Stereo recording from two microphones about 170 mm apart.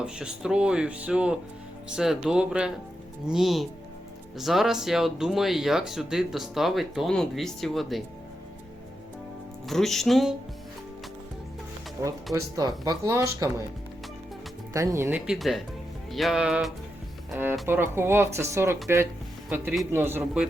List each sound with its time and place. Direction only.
0.0 s speech: 5° right (ahead or behind)
9.6 s speech: centre (ahead or behind)
12.0 s speech: 20° right (ahead or behind)
14.7 s speech: 20° right (ahead or behind)